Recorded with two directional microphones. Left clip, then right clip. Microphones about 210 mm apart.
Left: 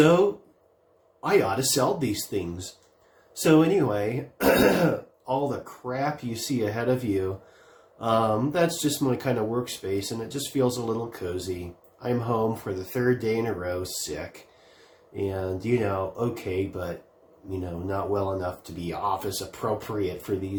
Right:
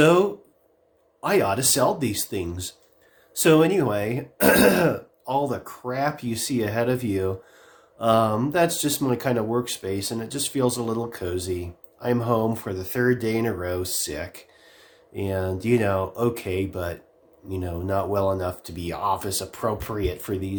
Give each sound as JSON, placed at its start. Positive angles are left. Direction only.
{"t": 1.2, "sound": "speech", "side_deg": -40}
{"t": 15.1, "sound": "speech", "side_deg": -40}